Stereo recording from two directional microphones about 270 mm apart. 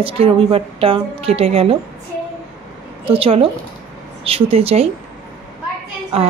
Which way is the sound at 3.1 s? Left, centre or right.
Right.